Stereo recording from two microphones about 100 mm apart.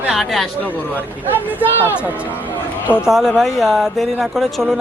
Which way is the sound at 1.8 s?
20° left (ahead or behind).